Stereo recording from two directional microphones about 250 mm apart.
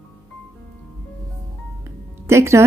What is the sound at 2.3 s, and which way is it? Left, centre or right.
Music, centre.